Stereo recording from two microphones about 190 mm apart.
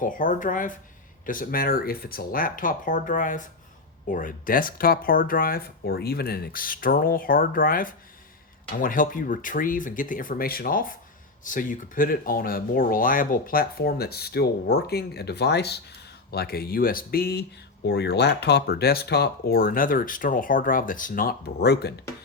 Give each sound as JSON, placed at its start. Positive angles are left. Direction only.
{"t": 0.0, "sound": "speech", "side_deg": 45}